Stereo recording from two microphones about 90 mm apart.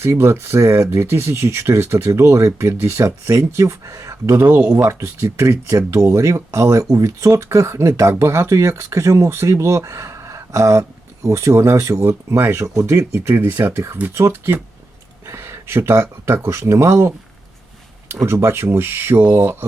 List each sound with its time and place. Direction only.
0.0 s speech: 30° right (ahead or behind)
4.8 s speech: 35° right (ahead or behind)
18.3 s speech: 30° right (ahead or behind)